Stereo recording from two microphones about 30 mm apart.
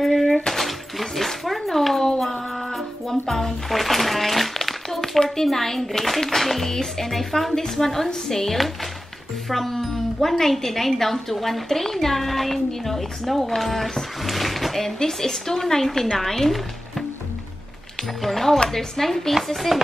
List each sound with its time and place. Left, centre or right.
0.0 s dishes: centre
0.5 s a sound: centre
2.1 s music: centre
3.1 s a sound: centre
5.3 s a child's voice: centre
18.2 s a child's voice: centre